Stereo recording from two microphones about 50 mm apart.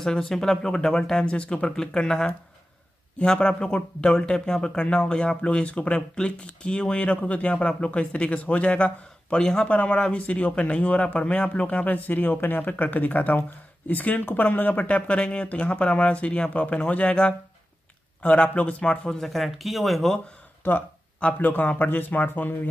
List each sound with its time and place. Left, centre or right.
0.0 s speech: centre
19.2 s speech: centre
20.6 s speech: left
21.4 s speech: left